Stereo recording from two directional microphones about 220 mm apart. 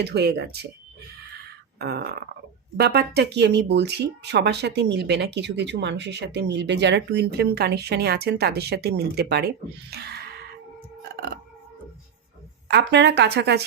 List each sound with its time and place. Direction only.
0.0 s speech: 50° right (ahead or behind)
1.8 s speech: 45° right (ahead or behind)
9.9 s music: 45° right (ahead or behind)
12.6 s speech: 50° right (ahead or behind)